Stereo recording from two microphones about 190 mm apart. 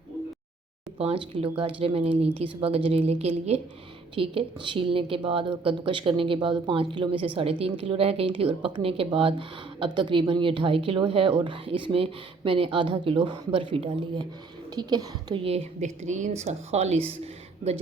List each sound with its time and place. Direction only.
0.9 s a woman's voice: 30° right (ahead or behind)